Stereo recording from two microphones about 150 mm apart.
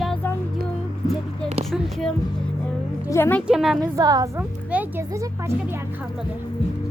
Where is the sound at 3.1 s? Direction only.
15° left (ahead or behind).